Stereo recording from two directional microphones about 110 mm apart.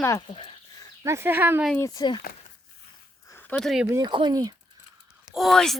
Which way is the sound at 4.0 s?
45° right (ahead or behind).